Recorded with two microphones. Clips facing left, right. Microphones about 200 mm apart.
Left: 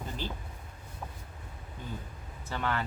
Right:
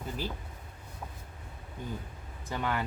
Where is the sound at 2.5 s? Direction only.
15° right (ahead or behind).